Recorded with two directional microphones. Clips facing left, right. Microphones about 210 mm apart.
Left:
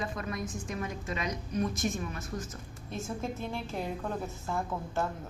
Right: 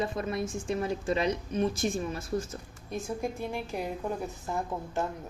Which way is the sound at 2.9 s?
15° right (ahead or behind).